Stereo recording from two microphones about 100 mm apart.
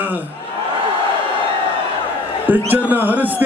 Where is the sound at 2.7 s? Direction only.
15° right (ahead or behind).